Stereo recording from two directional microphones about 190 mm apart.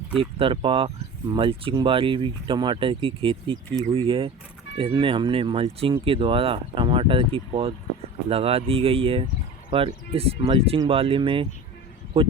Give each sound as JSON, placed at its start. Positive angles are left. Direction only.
{"t": 0.2, "sound": "speech", "side_deg": -30}